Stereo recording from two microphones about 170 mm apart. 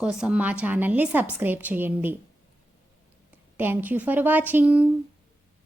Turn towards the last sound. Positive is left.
turn(degrees=-10)  # may be behind; listen again after turning